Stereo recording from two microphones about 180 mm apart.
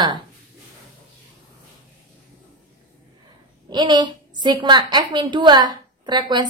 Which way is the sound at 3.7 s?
25° right (ahead or behind).